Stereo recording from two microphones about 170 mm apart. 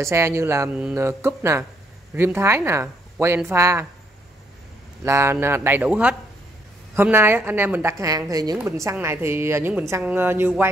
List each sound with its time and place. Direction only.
0.0 s a woman's voice: 15° right (ahead or behind)
5.0 s a woman's voice: 15° right (ahead or behind)